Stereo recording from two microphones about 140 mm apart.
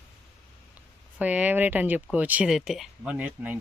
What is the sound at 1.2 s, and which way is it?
Speech, 10° right (ahead or behind).